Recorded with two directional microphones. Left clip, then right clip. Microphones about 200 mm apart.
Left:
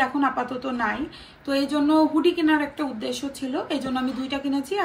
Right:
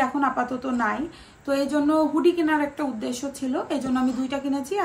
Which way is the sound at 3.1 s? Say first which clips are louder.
Left 1 dB; 35° right (ahead or behind).